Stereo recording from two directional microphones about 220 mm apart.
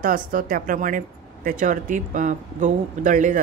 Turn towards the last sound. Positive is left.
turn(degrees=-35)  # may be behind; listen again after turning